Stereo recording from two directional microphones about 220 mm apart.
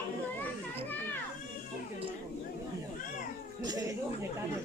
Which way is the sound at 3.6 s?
15° right (ahead or behind).